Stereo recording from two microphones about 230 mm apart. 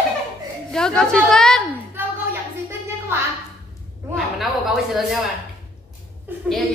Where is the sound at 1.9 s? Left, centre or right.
Centre.